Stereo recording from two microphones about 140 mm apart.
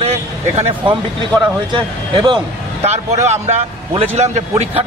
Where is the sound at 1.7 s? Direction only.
35° right (ahead or behind).